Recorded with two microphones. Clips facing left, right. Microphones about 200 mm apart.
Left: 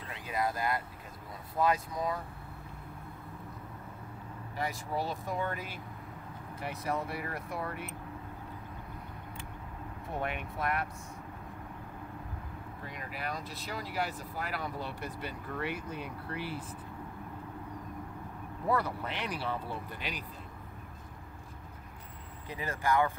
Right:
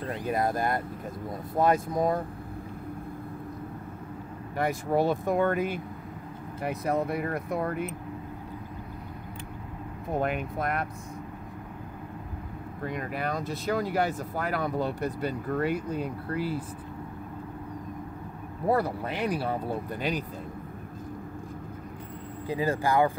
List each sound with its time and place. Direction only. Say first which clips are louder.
0.1 s speech: right 6 dB; 50° right (ahead or behind)
4.6 s speech: right 9 dB; 55° right (ahead or behind)
10.1 s speech: right 8 dB; 40° right (ahead or behind)
12.8 s speech: right 9 dB; 55° right (ahead or behind)
18.7 s speech: right 6 dB; 35° right (ahead or behind)
22.5 s speech: right 6 dB; 30° right (ahead or behind)